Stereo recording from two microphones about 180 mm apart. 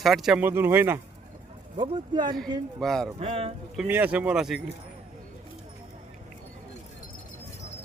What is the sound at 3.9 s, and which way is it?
Speech, 10° right (ahead or behind).